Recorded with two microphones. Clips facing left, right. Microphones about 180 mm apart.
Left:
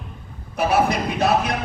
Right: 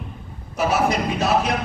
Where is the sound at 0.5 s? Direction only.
60° left (ahead or behind).